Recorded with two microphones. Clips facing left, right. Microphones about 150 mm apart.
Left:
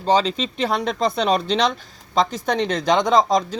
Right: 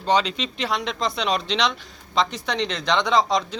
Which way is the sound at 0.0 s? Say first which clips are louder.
Left 3 dB; 35° left (ahead or behind).